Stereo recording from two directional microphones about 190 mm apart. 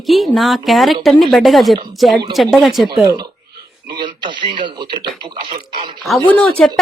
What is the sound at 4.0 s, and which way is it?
Speech, 25° right (ahead or behind).